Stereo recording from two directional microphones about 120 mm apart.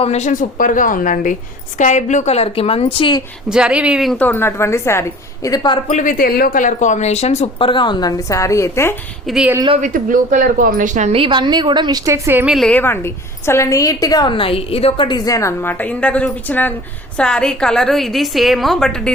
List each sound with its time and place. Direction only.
0.0 s a woman's voice: 65° left (ahead or behind); by 3.2 s 50° left (ahead or behind)
3.5 s speech: 5° right (ahead or behind)
4.2 s a woman's voice: 15° left (ahead or behind); by 5.8 s 35° left (ahead or behind)
6.6 s speech: 90° left; by 7.5 s 65° left (ahead or behind)
7.6 s a woman's voice: 40° left (ahead or behind)
8.3 s a woman's voice: 25° left (ahead or behind)
9.2 s a woman's voice: 5° right (ahead or behind)
9.8 s speech: 90° right
11.1 s a woman's voice: 45° right (ahead or behind); by 12.5 s 20° right (ahead or behind)
12.5 s a woman's voice: centre (ahead or behind)
12.7 s a woman's voice: 20° left (ahead or behind); by 15.0 s 55° left (ahead or behind)
15.0 s a woman's voice: 35° left (ahead or behind); by 19.1 s 5° left (ahead or behind)